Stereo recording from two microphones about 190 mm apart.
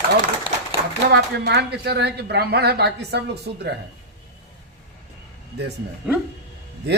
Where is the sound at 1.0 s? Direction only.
60° right (ahead or behind).